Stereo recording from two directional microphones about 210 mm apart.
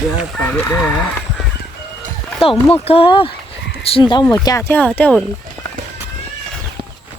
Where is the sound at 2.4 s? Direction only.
25° left (ahead or behind); by 5.2 s 5° left (ahead or behind).